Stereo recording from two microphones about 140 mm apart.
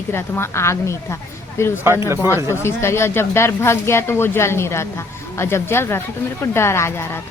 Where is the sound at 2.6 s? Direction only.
20° left (ahead or behind).